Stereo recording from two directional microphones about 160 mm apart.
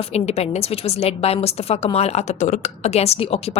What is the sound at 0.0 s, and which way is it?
A woman's voice, 40° left (ahead or behind).